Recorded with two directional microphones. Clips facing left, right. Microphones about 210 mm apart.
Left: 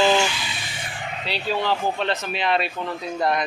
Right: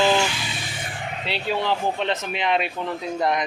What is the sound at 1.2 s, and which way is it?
Speech, 20° right (ahead or behind).